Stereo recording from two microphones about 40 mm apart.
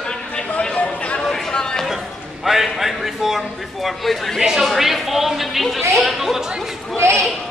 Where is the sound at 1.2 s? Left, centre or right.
Centre.